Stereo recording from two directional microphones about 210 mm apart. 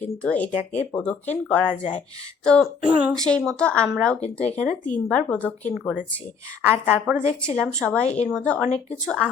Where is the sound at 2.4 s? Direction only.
5° left (ahead or behind).